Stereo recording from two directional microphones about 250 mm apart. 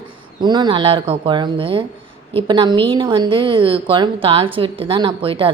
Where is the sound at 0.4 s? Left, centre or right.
Centre.